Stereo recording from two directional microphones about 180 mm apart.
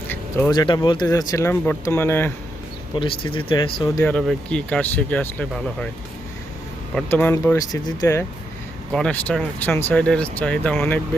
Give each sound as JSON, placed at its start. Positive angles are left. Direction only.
{"t": 0.1, "sound": "a sound", "side_deg": 10}
{"t": 0.5, "sound": "speech", "side_deg": 25}
{"t": 2.9, "sound": "speech", "side_deg": 25}
{"t": 4.1, "sound": "speech", "side_deg": 5}
{"t": 6.9, "sound": "speech", "side_deg": 10}
{"t": 8.9, "sound": "speech", "side_deg": 5}